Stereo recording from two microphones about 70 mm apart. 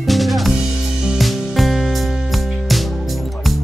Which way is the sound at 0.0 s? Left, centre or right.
Centre.